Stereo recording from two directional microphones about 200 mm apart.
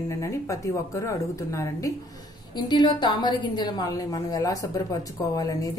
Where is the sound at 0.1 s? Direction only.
15° left (ahead or behind).